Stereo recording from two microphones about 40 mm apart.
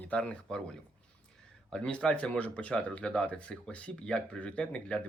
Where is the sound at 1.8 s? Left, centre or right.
Left.